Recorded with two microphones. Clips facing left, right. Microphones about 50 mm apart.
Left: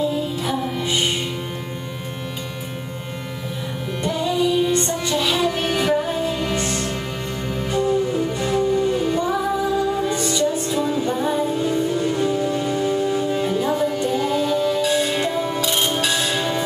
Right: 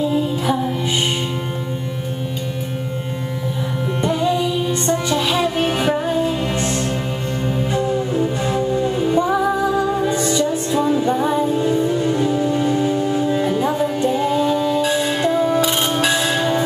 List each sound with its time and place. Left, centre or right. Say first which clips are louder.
0.1 s music: right 4 dB; right
4.0 s music: right 4 dB; right
5.1 s music: left 2 dB; centre
8.4 s music: even; centre
12.9 s music: right 2 dB; centre
15.1 s music: right 5 dB; centre
15.6 s bell: right 3 dB; centre